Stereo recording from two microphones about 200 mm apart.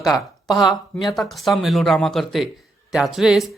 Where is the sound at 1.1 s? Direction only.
Centre (ahead or behind).